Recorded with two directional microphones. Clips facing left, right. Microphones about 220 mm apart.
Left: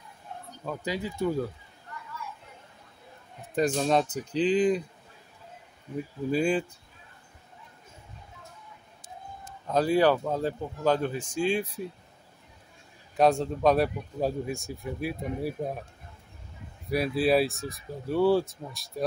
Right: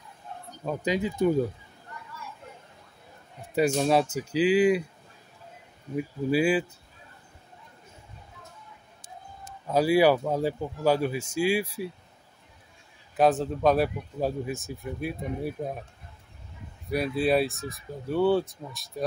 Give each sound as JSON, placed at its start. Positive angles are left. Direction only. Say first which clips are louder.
{"t": 0.7, "sound": "speech", "louder": "right 5 dB", "side_deg": -20}
{"t": 3.5, "sound": "speech", "louder": "right 2 dB", "side_deg": -10}
{"t": 6.3, "sound": "speech", "louder": "right 2 dB", "side_deg": -5}
{"t": 9.7, "sound": "speech", "louder": "right 2 dB", "side_deg": -10}
{"t": 13.1, "sound": "speech", "louder": "even", "side_deg": -5}
{"t": 16.9, "sound": "speech", "louder": "even", "side_deg": 0}